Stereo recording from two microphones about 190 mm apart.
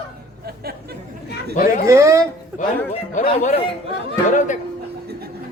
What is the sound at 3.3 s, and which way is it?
A man's voice, 35° left (ahead or behind).